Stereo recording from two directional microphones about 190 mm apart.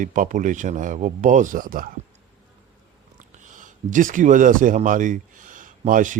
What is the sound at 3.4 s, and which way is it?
Speech, 40° right (ahead or behind).